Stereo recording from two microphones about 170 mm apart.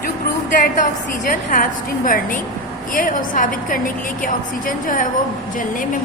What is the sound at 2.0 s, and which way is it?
A woman's voice, 55° left (ahead or behind).